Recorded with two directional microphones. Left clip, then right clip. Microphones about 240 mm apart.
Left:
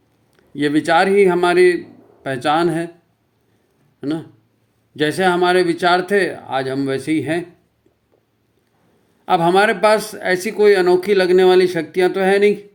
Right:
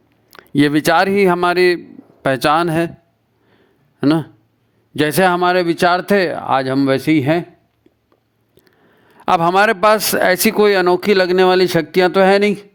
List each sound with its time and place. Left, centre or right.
0.3 s speech: right
4.0 s speech: right
9.2 s speech: right